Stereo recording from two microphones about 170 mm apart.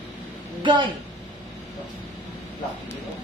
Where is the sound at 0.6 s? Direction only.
30° right (ahead or behind).